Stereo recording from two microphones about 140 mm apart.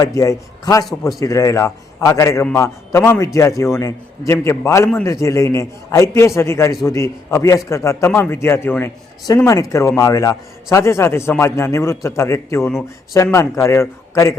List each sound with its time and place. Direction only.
0.0 s a man's voice: 25° left (ahead or behind)